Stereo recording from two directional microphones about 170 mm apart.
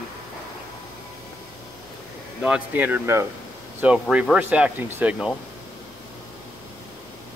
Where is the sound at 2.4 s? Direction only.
10° right (ahead or behind).